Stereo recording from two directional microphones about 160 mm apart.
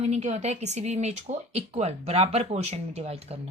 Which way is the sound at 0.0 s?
45° right (ahead or behind).